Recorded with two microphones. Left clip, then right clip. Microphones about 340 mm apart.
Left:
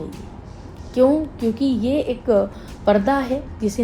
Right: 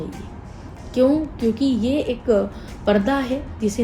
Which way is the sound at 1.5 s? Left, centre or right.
Centre.